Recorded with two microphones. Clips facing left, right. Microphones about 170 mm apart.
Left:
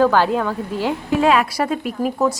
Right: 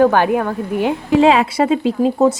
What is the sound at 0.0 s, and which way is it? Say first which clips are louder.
Speech: right 3 dB; 15° right (ahead or behind).